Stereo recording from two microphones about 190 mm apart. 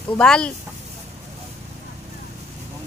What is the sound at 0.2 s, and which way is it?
Speech, 5° left (ahead or behind).